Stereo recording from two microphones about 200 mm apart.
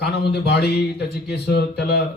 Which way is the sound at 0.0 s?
55° left (ahead or behind).